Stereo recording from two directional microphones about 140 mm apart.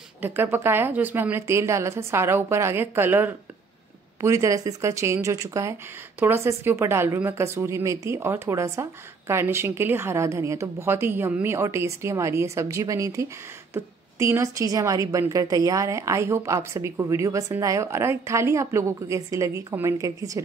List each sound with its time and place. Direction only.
0.2 s a woman's voice: 15° right (ahead or behind)